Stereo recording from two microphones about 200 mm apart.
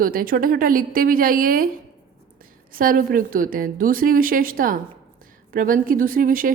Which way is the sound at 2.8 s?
45° right (ahead or behind).